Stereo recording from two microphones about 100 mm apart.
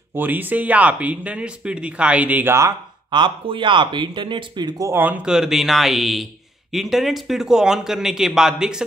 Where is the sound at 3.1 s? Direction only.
50° right (ahead or behind).